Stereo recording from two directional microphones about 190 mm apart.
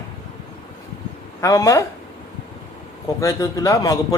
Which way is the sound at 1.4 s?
15° left (ahead or behind).